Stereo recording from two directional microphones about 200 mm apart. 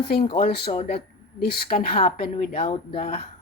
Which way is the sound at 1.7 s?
30° left (ahead or behind).